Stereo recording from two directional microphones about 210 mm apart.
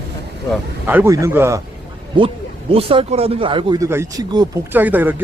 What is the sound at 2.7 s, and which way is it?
Speech, 25° right (ahead or behind).